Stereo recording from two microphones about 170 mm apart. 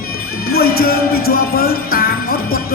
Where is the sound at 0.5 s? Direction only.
65° left (ahead or behind).